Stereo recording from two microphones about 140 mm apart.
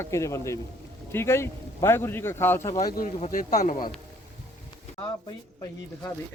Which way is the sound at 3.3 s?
75° left (ahead or behind).